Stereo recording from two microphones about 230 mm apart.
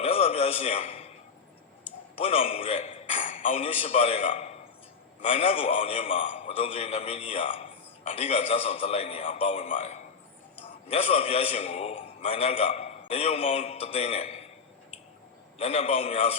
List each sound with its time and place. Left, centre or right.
0.0 s a sound: left
2.1 s a man's voice: left
15.5 s a man's voice: left